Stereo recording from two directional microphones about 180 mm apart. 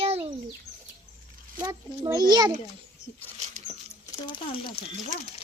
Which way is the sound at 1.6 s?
15° right (ahead or behind).